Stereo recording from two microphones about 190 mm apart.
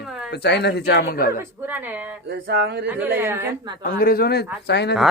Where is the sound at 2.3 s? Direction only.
60° right (ahead or behind).